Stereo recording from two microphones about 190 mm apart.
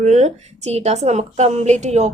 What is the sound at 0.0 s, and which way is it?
A woman's voice, 35° right (ahead or behind).